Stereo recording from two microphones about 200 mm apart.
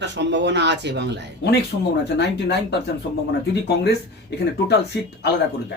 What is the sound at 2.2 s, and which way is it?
Speech, 55° left (ahead or behind).